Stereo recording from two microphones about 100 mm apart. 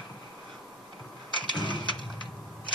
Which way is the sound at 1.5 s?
50° left (ahead or behind).